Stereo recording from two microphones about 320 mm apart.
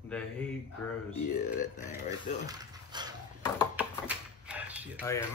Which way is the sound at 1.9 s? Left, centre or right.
Centre.